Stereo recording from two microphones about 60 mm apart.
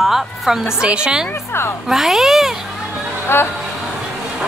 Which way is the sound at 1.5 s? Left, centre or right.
Left.